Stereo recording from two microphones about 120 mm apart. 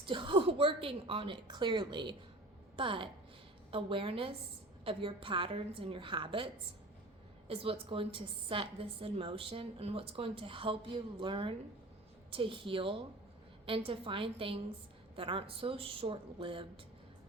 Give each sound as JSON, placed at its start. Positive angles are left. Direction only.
{"t": 0.0, "sound": "a woman's voice", "side_deg": -45}